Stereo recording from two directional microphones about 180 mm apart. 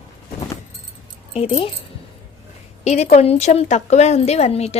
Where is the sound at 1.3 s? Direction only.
35° left (ahead or behind).